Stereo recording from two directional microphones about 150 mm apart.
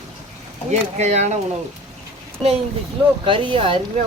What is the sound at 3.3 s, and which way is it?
Speech, 35° right (ahead or behind).